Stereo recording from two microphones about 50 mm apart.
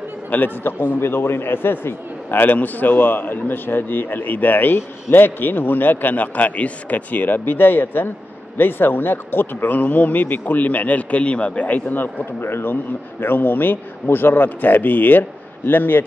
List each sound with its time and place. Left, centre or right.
0.3 s a man's voice: left
13.2 s a man's voice: left